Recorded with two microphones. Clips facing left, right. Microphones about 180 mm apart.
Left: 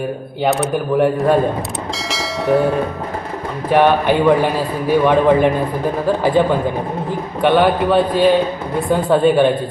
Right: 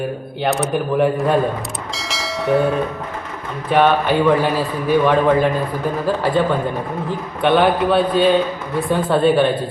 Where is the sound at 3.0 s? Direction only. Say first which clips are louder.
Left 4 dB; 35° left (ahead or behind).